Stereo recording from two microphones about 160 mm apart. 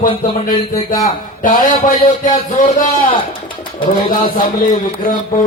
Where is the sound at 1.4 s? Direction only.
60° left (ahead or behind).